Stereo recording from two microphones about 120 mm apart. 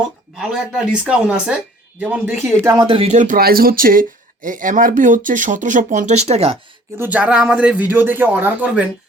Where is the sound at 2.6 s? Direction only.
30° right (ahead or behind).